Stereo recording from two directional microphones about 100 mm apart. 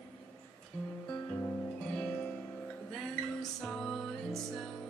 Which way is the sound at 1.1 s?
15° left (ahead or behind).